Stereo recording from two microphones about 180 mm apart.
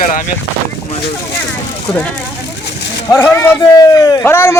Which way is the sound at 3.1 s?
15° left (ahead or behind).